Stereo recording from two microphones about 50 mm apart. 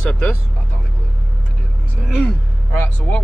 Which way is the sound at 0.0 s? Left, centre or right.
Centre.